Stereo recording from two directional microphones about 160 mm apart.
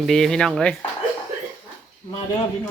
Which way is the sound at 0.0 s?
Centre (ahead or behind).